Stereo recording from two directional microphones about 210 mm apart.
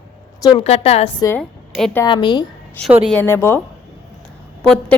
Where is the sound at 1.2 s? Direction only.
5° left (ahead or behind).